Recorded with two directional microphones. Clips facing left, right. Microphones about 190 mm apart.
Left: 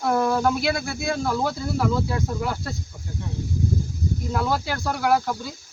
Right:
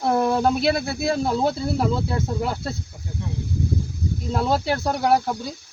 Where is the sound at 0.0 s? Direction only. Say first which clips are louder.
Right 1 dB; 25° right (ahead or behind).